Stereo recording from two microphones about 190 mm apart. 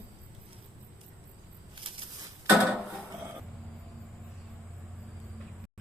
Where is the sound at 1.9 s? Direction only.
25° right (ahead or behind).